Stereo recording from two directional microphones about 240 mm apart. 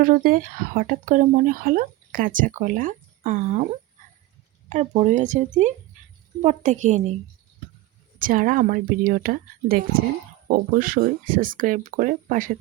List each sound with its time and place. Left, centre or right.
0.0 s speech: right
4.7 s a woman's voice: right
8.2 s speech: right